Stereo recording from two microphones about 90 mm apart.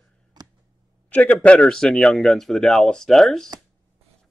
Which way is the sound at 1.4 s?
10° left (ahead or behind).